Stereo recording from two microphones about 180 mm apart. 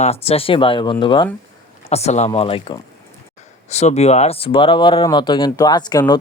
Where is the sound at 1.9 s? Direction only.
35° left (ahead or behind).